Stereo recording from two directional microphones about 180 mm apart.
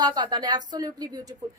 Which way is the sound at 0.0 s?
20° right (ahead or behind).